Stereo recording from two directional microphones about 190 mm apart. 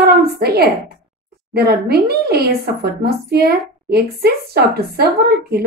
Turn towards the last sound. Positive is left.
turn(degrees=-55)  # may be behind; listen again after turning